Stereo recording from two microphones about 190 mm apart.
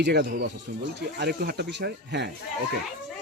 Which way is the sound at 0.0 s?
60° right (ahead or behind).